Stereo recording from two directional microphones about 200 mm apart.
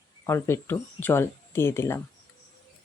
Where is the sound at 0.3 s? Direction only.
15° left (ahead or behind).